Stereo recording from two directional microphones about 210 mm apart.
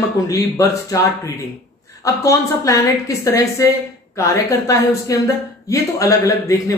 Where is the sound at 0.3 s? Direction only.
15° left (ahead or behind).